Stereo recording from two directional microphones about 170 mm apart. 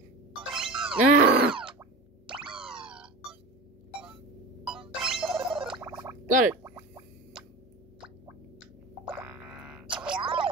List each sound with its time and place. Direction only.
0.5 s music: centre (ahead or behind)
1.1 s a sound: 55° right (ahead or behind)
1.6 s a sound: 5° right (ahead or behind)
2.5 s music: 5° right (ahead or behind)
4.7 s music: centre (ahead or behind)
5.4 s gargling: 30° right (ahead or behind)
5.8 s gargling: 15° right (ahead or behind)
6.2 s gargling: 50° right (ahead or behind)
6.5 s gargling: 15° right (ahead or behind)
9.1 s music: 5° right (ahead or behind)
10.2 s a sound: 30° right (ahead or behind)